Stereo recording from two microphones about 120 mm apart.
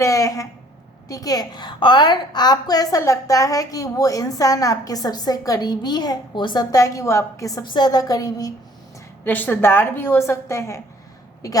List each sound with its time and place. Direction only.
0.0 s a woman's voice: 25° left (ahead or behind)
9.2 s a woman's voice: 15° left (ahead or behind)